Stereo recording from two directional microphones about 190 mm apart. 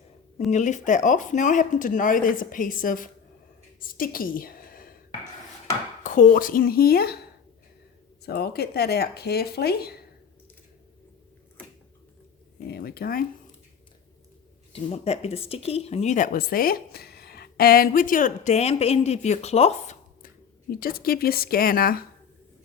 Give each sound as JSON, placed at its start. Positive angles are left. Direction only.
{"t": 0.5, "sound": "a woman's voice", "side_deg": 40}
{"t": 6.0, "sound": "speech", "side_deg": 40}
{"t": 8.2, "sound": "speech", "side_deg": 55}
{"t": 12.6, "sound": "speech", "side_deg": 55}
{"t": 14.7, "sound": "speech", "side_deg": 30}
{"t": 20.2, "sound": "speech", "side_deg": 50}